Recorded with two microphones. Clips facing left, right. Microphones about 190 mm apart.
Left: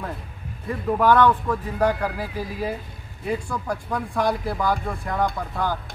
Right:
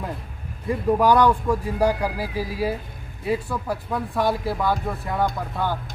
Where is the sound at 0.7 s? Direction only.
10° right (ahead or behind).